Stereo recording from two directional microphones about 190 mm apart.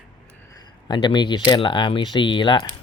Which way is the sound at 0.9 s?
25° left (ahead or behind).